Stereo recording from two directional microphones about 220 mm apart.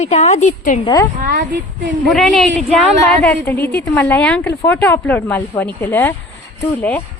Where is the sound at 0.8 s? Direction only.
20° left (ahead or behind).